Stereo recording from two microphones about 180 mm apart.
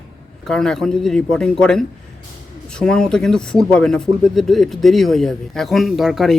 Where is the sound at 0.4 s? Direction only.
5° left (ahead or behind).